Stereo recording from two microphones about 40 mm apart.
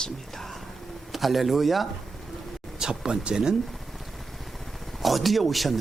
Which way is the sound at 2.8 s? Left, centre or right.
Centre.